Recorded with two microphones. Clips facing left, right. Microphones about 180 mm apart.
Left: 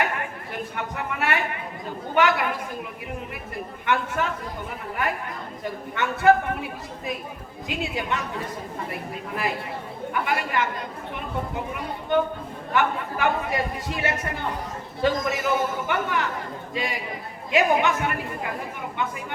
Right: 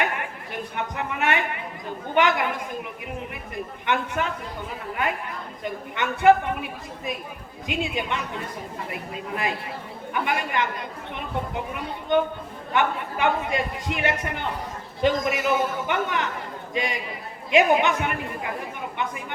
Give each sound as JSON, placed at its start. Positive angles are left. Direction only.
{"t": 0.0, "sound": "a sound", "side_deg": -20}
{"t": 2.1, "sound": "a man's voice", "side_deg": -20}
{"t": 5.6, "sound": "a man's voice", "side_deg": -20}